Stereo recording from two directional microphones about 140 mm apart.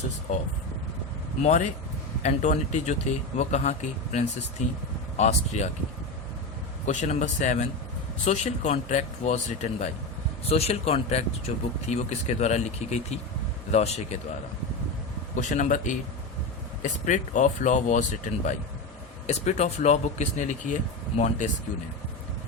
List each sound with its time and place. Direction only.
1.4 s a man's voice: 55° left (ahead or behind)
6.8 s a man's voice: 55° left (ahead or behind)
15.4 s a man's voice: 65° left (ahead or behind)